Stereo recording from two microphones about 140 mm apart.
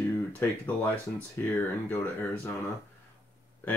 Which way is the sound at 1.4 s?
10° left (ahead or behind).